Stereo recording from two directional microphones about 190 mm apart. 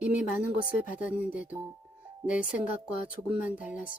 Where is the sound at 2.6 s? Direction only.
45° left (ahead or behind).